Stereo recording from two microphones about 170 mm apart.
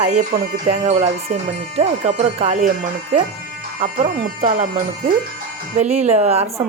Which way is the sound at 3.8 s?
55° right (ahead or behind).